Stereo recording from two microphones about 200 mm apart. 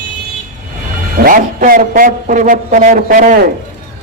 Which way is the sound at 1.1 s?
45° right (ahead or behind).